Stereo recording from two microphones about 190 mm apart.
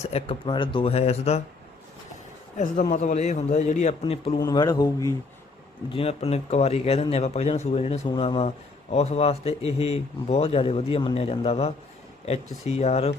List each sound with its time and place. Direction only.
0.0 s speech: 35° left (ahead or behind)
2.9 s speech: 35° left (ahead or behind)
4.4 s speech: 20° left (ahead or behind)
5.9 s speech: 30° left (ahead or behind)